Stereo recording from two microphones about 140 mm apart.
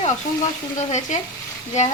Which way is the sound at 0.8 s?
55° left (ahead or behind).